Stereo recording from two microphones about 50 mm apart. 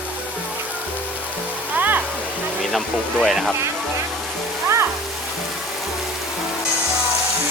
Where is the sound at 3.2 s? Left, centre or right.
Centre.